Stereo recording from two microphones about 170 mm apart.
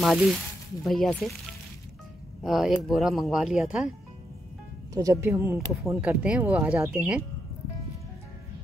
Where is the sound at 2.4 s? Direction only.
Centre (ahead or behind).